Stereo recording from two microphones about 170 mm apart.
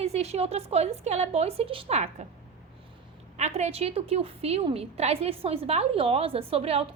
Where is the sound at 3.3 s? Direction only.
40° right (ahead or behind).